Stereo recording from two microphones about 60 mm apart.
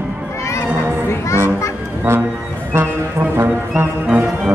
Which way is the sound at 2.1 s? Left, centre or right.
Right.